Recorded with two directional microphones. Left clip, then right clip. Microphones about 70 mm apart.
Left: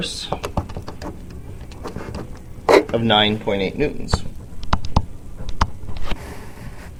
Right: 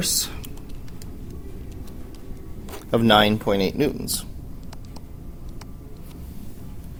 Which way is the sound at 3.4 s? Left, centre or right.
Right.